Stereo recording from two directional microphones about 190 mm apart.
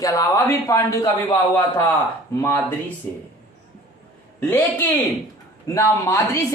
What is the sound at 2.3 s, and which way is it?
Speech, 15° left (ahead or behind).